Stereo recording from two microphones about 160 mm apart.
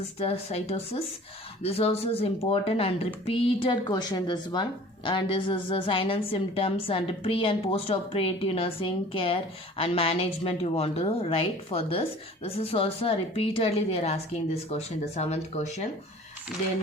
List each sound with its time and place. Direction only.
0.2 s speech: 40° left (ahead or behind)